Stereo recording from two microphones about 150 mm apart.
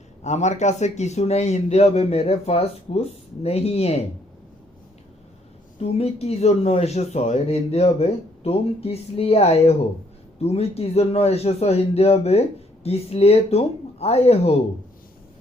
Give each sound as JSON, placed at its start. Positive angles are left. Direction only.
{"t": 0.2, "sound": "speech", "side_deg": 50}
{"t": 5.8, "sound": "speech", "side_deg": 45}